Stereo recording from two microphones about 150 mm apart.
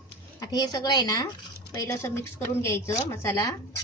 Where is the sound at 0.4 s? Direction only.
25° left (ahead or behind).